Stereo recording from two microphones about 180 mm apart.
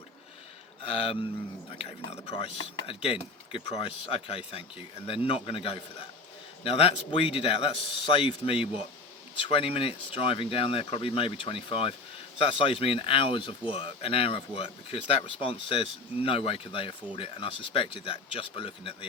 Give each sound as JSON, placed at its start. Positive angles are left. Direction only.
{"t": 0.8, "sound": "speech", "side_deg": 30}